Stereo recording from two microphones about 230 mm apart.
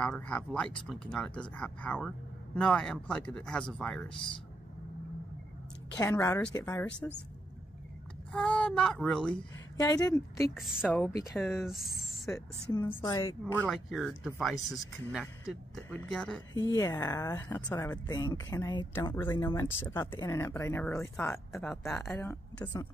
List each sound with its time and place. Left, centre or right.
0.0 s speech: centre
5.9 s speech: centre
8.3 s speech: centre
9.8 s speech: centre
10.6 s speech: centre
11.8 s speech: centre
12.7 s speech: centre
13.7 s speech: centre
16.5 s speech: centre